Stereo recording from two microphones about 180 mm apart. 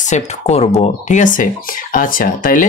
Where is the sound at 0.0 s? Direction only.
40° left (ahead or behind).